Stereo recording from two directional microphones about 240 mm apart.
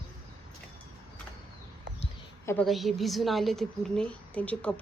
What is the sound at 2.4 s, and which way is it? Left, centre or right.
A woman's voice, centre.